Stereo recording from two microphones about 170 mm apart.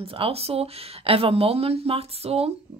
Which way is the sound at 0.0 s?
35° right (ahead or behind).